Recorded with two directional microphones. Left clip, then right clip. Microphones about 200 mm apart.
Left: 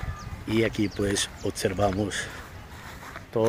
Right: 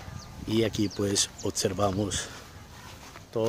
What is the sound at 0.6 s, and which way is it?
Speech, 25° right (ahead or behind).